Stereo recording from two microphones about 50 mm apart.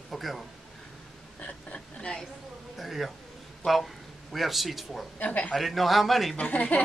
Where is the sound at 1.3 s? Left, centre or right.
Left.